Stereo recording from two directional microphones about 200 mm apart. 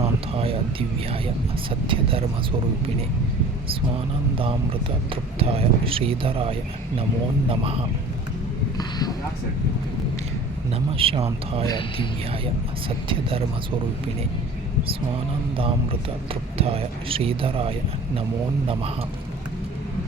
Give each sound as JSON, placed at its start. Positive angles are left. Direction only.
{"t": 0.0, "sound": "a sound", "side_deg": -30}
{"t": 1.9, "sound": "speech", "side_deg": -25}
{"t": 4.4, "sound": "speech", "side_deg": -25}
{"t": 8.8, "sound": "speech", "side_deg": 20}
{"t": 10.7, "sound": "speech", "side_deg": -25}
{"t": 11.6, "sound": "speech", "side_deg": 20}
{"t": 13.1, "sound": "speech", "side_deg": -25}
{"t": 15.5, "sound": "speech", "side_deg": -25}